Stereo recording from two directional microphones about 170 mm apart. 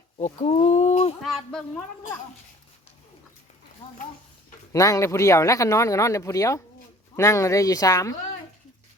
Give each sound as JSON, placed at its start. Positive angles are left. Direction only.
{"t": 0.2, "sound": "speech", "side_deg": 40}
{"t": 1.2, "sound": "speech", "side_deg": 0}
{"t": 4.7, "sound": "speech", "side_deg": 20}